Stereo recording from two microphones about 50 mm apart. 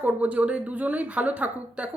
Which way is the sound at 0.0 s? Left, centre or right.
Right.